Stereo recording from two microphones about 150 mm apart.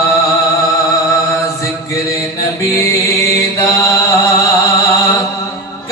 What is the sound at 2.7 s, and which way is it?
Mantra, 20° left (ahead or behind).